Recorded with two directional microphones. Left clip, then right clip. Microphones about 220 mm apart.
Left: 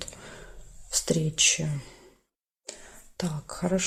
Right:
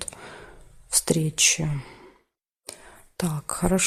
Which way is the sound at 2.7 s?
35° right (ahead or behind).